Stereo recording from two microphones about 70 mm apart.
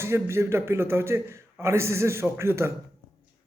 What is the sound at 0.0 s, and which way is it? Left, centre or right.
A man's voice, right.